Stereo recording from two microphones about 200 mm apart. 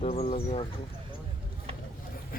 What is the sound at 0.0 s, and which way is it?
Speech, 30° left (ahead or behind).